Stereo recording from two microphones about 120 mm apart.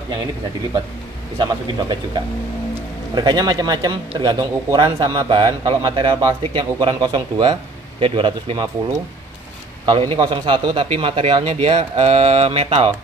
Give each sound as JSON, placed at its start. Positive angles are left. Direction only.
{"t": 1.4, "sound": "a man's voice", "side_deg": -40}
{"t": 9.8, "sound": "a man's voice", "side_deg": -45}